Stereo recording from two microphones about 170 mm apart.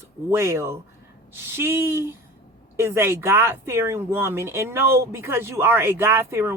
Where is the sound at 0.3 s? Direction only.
15° right (ahead or behind).